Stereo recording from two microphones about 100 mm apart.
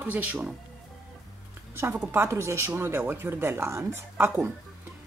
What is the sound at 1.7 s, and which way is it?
A woman's voice, 25° right (ahead or behind).